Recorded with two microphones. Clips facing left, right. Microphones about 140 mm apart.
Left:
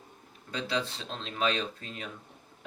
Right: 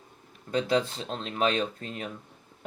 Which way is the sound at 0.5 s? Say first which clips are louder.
Right 7 dB; 45° right (ahead or behind).